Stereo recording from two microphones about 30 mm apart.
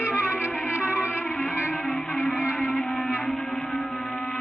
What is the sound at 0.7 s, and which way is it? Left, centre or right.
Music, right.